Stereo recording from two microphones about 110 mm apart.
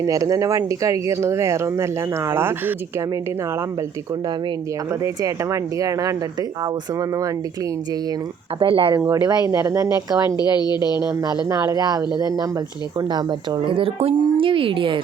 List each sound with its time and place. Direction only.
0.0 s speech: 30° right (ahead or behind)
5.0 s speech: 30° right (ahead or behind)
8.5 s speech: 50° right (ahead or behind)
9.0 s speech: 15° right (ahead or behind)
9.2 s speech: 30° right (ahead or behind)
10.3 s speech: 40° left (ahead or behind)
11.7 s speech: 40° right (ahead or behind)